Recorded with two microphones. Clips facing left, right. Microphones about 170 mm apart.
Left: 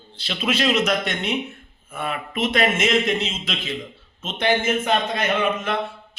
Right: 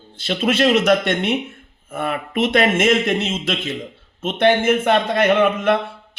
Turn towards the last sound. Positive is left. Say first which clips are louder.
# right 7 dB
turn(degrees=-55)  # may be behind; listen again after turning